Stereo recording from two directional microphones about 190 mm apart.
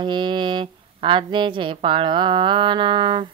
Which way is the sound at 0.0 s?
25° right (ahead or behind).